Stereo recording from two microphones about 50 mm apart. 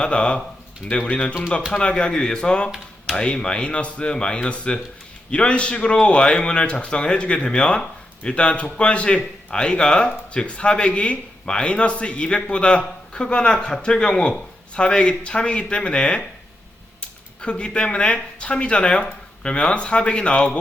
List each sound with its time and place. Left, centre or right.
0.0 s a man's voice: left
17.4 s a man's voice: left